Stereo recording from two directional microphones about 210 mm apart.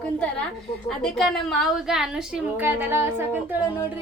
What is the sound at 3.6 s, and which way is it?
Speech, 15° left (ahead or behind).